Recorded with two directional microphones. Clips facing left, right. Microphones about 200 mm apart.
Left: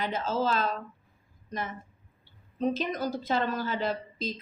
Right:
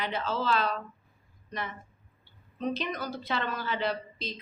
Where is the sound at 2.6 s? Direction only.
45° left (ahead or behind).